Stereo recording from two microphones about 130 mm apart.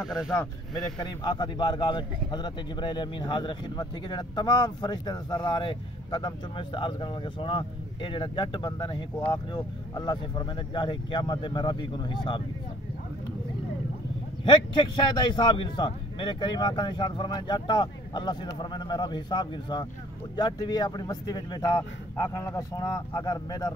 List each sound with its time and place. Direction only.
0.0 s speech: 5° right (ahead or behind)
1.0 s a man's voice: 30° left (ahead or behind)
14.4 s a man's voice: 35° left (ahead or behind)